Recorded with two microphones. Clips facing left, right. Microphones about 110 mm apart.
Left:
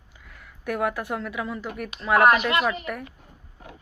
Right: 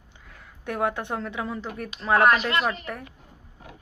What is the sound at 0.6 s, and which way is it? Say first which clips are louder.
A woman's voice: left 1 dB; 25° right (ahead or behind).